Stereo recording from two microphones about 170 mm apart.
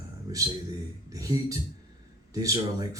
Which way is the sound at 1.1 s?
20° right (ahead or behind).